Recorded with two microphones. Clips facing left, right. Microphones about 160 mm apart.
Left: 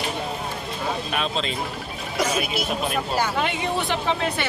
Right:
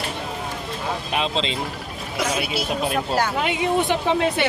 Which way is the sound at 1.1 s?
25° right (ahead or behind).